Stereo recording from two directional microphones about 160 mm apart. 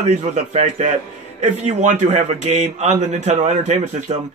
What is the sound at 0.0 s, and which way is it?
A man's voice, 45° right (ahead or behind).